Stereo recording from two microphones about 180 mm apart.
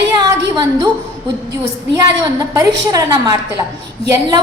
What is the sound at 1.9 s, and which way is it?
A woman's voice, 20° right (ahead or behind).